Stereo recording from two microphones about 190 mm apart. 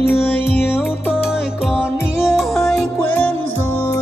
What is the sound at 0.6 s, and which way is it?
Music, 10° left (ahead or behind).